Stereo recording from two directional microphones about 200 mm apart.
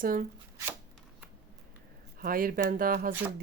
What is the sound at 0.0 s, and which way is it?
Speech, 45° right (ahead or behind).